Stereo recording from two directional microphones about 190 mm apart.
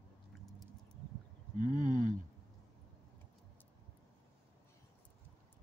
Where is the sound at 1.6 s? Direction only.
40° right (ahead or behind).